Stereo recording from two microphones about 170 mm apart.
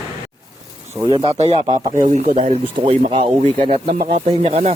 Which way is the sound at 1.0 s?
25° right (ahead or behind).